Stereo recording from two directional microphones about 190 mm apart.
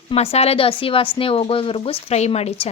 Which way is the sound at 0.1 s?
30° left (ahead or behind).